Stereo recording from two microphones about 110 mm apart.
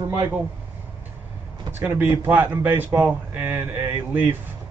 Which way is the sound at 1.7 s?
20° right (ahead or behind).